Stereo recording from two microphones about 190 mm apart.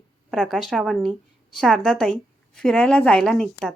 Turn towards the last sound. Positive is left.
turn(degrees=5)  # may be behind; listen again after turning